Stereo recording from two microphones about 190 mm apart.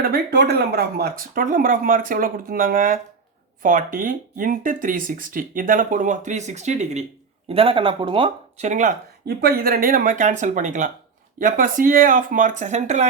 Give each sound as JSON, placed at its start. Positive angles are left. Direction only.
{"t": 0.0, "sound": "speech", "side_deg": -55}